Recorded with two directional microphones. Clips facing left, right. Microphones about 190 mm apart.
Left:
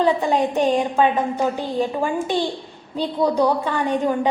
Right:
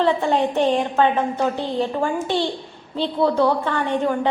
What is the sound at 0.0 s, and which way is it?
A woman's voice, 15° left (ahead or behind).